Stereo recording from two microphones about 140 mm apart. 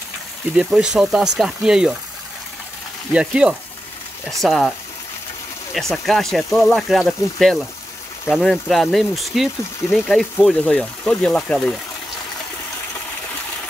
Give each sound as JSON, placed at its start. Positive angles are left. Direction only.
{"t": 0.6, "sound": "speech", "side_deg": -5}
{"t": 3.1, "sound": "speech", "side_deg": -5}
{"t": 5.8, "sound": "speech", "side_deg": 0}